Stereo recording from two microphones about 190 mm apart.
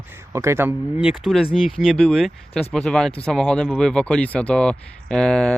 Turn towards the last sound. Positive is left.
turn(degrees=5)  # may be behind; listen again after turning